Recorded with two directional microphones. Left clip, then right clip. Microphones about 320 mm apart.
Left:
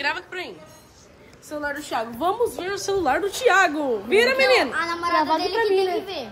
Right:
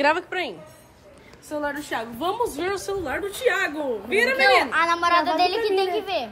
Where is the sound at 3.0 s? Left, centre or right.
Centre.